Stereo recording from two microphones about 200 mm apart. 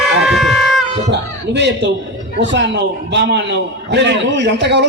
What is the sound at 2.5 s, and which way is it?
A man's voice, 60° right (ahead or behind).